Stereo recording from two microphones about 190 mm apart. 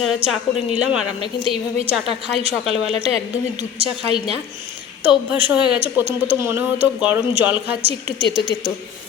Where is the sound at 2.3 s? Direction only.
Centre (ahead or behind).